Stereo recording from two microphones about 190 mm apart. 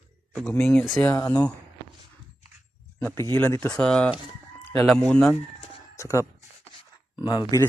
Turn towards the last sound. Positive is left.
turn(degrees=20)  # may be behind; listen again after turning